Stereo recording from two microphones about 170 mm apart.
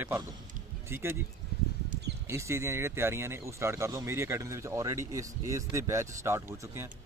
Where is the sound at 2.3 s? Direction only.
15° right (ahead or behind).